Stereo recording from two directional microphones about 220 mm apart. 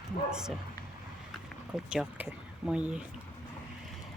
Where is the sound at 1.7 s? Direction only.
5° right (ahead or behind).